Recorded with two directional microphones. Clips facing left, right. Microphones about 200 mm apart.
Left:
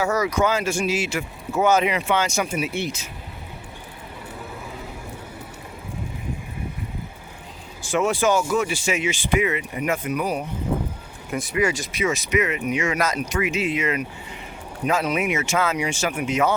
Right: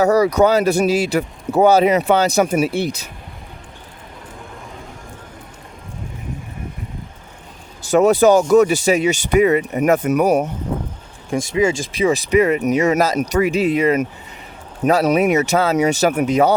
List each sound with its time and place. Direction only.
0.0 s speech: 35° right (ahead or behind)
7.9 s speech: 40° right (ahead or behind)
11.5 s speech: 25° right (ahead or behind)